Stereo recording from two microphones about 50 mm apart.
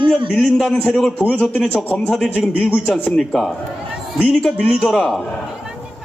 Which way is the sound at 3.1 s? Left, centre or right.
Centre.